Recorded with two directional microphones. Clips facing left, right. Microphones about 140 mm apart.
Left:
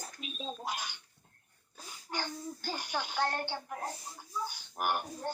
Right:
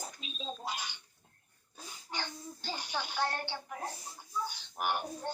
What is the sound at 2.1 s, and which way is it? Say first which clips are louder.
A child's voice: left 3 dB; 10° left (ahead or behind).